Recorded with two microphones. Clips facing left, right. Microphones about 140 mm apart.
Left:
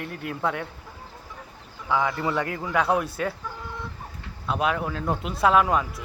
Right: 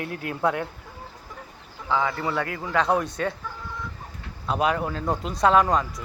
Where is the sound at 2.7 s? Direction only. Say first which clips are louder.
Right 1 dB; 10° left (ahead or behind).